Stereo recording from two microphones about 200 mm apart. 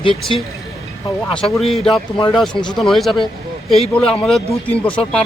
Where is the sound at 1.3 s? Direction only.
5° left (ahead or behind).